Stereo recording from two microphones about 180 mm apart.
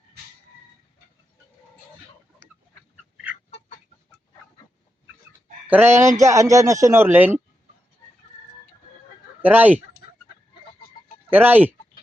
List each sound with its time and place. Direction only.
5.6 s speech: 10° right (ahead or behind)
9.4 s speech: 10° right (ahead or behind)
11.3 s speech: 10° right (ahead or behind)